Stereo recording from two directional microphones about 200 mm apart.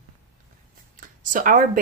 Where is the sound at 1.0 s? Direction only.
40° right (ahead or behind).